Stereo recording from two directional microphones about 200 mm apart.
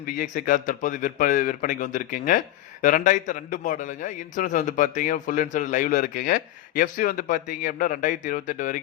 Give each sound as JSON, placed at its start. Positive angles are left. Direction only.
{"t": 0.0, "sound": "a man's voice", "side_deg": 45}